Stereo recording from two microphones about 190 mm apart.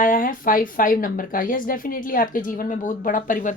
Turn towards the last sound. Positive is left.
turn(degrees=45)  # may be behind; listen again after turning